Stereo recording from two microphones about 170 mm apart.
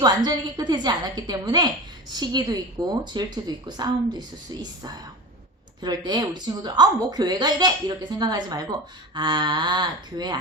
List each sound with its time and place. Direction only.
0.0 s a woman's voice: 25° right (ahead or behind)